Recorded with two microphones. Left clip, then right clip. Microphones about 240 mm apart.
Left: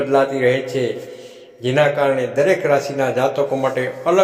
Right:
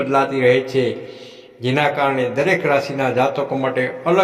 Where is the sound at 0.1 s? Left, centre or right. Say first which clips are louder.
Right 1 dB; right.